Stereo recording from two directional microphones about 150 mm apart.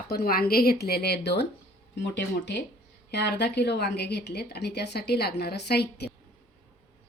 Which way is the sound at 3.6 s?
90° left.